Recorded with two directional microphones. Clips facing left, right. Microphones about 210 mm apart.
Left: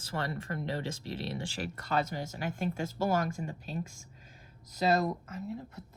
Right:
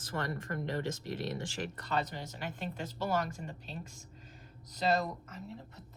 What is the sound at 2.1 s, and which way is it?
Speech, 45° left (ahead or behind).